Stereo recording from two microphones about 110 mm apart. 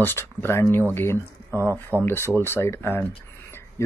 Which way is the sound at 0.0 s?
20° left (ahead or behind).